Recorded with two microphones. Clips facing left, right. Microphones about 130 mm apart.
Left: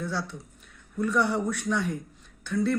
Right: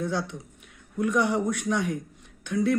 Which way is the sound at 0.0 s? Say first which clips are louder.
Right 3 dB; 15° right (ahead or behind).